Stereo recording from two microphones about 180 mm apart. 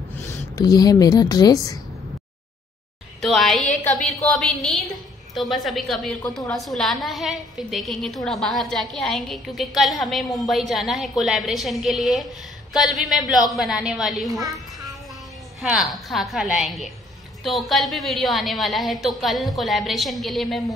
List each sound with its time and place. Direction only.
0.3 s speech: 20° left (ahead or behind)
3.2 s a woman's voice: centre (ahead or behind)
15.6 s a woman's voice: 5° right (ahead or behind)